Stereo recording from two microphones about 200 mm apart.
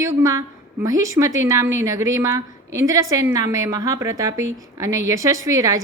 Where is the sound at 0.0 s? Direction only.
15° right (ahead or behind).